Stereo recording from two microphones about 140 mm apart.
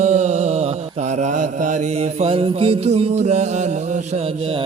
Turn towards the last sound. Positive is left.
turn(degrees=-50)  # may be behind; listen again after turning